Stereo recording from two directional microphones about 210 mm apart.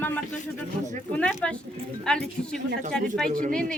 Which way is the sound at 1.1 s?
5° left (ahead or behind).